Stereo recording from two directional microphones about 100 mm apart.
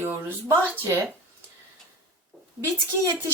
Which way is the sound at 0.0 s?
25° right (ahead or behind).